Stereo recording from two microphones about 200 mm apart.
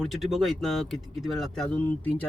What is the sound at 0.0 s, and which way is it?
Speech, centre (ahead or behind).